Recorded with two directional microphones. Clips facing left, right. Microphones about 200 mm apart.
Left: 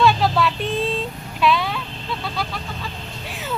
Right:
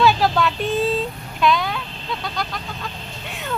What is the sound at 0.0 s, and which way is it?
Vehicle, centre (ahead or behind).